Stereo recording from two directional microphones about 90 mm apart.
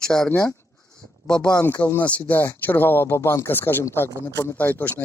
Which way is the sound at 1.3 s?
10° left (ahead or behind).